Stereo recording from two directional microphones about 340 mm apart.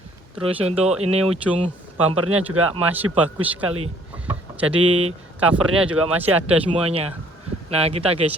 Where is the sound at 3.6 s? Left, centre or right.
Right.